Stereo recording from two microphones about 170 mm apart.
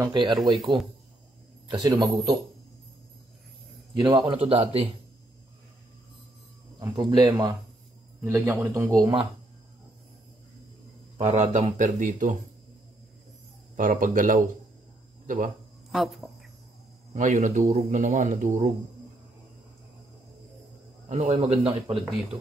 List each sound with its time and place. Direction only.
0.0 s speech: 25° right (ahead or behind)
4.3 s speech: 35° right (ahead or behind)
6.8 s a man's voice: 25° right (ahead or behind)
8.9 s speech: 25° right (ahead or behind)
11.1 s speech: 45° right (ahead or behind)
13.7 s speech: 50° right (ahead or behind)
15.9 s speech: centre (ahead or behind)
17.1 s speech: 45° right (ahead or behind)
21.1 s speech: 35° right (ahead or behind)